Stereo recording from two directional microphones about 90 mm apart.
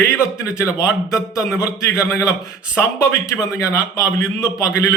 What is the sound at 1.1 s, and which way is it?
Speech, 5° right (ahead or behind).